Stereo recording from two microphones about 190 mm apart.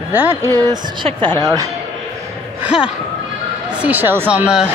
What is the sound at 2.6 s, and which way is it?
Speech, 5° right (ahead or behind).